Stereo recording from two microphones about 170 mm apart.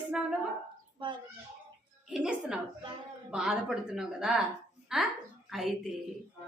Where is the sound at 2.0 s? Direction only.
5° right (ahead or behind).